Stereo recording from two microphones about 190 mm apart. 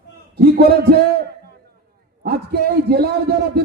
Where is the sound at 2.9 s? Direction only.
55° right (ahead or behind).